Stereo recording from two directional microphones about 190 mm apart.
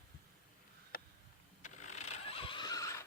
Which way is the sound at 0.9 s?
50° left (ahead or behind).